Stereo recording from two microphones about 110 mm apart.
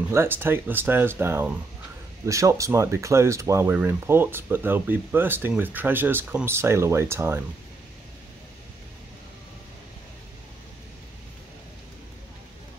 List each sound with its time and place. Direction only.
0.1 s speech: 20° right (ahead or behind)